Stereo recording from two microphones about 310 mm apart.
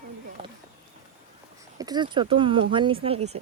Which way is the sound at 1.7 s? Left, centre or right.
Centre.